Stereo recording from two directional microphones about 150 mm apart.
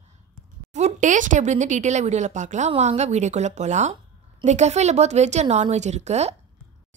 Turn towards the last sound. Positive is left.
turn(degrees=-45)  # may be behind; listen again after turning